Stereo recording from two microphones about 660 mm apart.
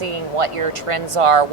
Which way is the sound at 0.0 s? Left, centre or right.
Right.